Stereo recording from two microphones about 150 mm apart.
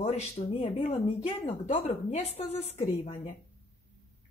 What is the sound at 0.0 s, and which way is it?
Speech, 45° left (ahead or behind).